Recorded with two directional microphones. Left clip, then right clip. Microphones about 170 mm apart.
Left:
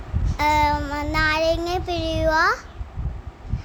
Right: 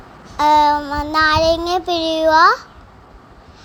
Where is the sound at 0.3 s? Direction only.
15° right (ahead or behind).